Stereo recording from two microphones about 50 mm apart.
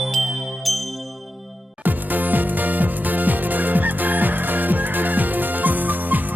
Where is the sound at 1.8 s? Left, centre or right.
Right.